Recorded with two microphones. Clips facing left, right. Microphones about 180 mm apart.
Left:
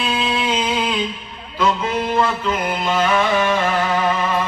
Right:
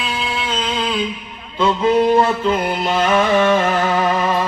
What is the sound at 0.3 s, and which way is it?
Humming, 10° left (ahead or behind).